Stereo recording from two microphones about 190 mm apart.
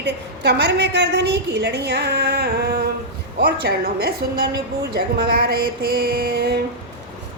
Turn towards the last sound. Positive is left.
turn(degrees=-55)  # may be behind; listen again after turning